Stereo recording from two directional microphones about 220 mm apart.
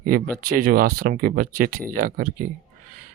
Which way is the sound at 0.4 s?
40° right (ahead or behind).